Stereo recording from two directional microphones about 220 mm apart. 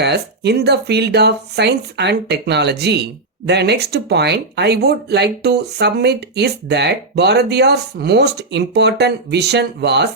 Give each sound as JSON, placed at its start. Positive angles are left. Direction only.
{"t": 0.0, "sound": "speech", "side_deg": -50}